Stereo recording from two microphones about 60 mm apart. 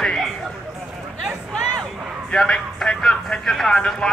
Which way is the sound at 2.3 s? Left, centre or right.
Centre.